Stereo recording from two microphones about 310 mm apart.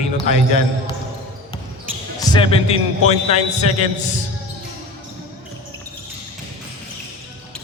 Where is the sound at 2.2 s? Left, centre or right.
Centre.